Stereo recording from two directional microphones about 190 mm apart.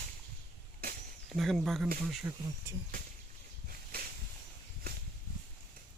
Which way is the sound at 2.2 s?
15° right (ahead or behind).